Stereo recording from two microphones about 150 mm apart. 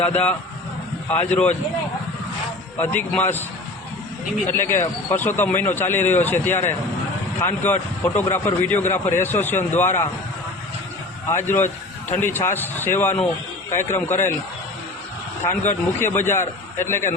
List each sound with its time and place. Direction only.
0.0 s speech: 10° left (ahead or behind)
2.7 s speech: 10° left (ahead or behind)
4.4 s speech: 15° left (ahead or behind)
11.4 s speech: 15° left (ahead or behind)
15.4 s speech: 15° left (ahead or behind)